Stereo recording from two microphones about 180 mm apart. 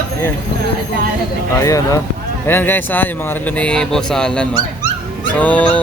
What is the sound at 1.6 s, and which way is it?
Speech, 20° left (ahead or behind).